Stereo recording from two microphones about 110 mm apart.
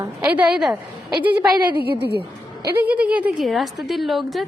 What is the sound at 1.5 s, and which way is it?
Speech, 40° right (ahead or behind).